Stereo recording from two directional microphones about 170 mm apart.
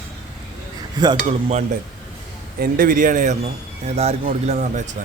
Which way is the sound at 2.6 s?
55° right (ahead or behind).